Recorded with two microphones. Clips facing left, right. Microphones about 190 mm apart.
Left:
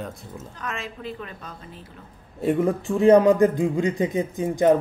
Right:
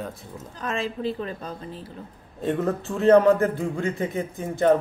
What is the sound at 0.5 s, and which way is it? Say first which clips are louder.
A woman's voice: right 6 dB; 30° right (ahead or behind).